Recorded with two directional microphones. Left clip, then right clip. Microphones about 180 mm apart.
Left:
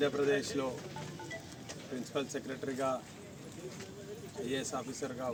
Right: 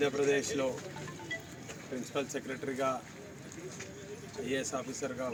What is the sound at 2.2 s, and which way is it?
Speech, 5° right (ahead or behind).